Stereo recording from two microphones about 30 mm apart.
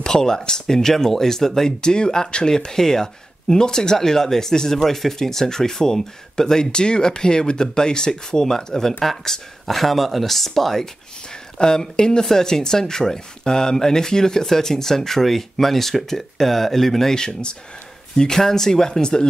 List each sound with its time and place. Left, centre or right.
0.0 s speech: left
1.8 s speech: left; by 10.9 s centre
11.5 s speech: left
17.1 s speech: left
18.1 s speech: centre